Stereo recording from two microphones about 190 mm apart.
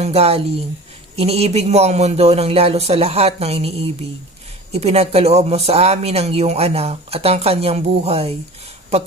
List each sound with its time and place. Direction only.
0.0 s speech: 30° right (ahead or behind)